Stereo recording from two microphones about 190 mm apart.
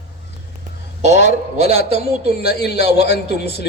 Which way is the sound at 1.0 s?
40° right (ahead or behind).